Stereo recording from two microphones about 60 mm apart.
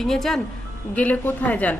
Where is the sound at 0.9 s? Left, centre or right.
Left.